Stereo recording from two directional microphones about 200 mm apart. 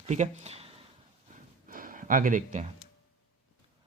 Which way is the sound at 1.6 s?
45° right (ahead or behind).